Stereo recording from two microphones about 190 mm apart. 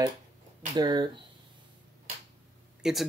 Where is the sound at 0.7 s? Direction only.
25° right (ahead or behind).